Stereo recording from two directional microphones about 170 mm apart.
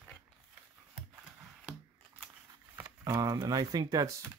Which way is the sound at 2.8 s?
20° right (ahead or behind).